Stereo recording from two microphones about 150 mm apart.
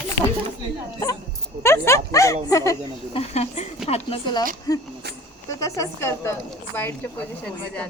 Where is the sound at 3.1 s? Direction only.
45° left (ahead or behind).